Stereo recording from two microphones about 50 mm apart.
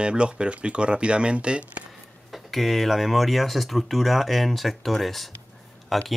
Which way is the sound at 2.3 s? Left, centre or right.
Centre.